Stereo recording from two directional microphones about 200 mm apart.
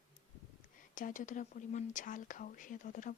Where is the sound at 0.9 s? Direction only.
40° left (ahead or behind).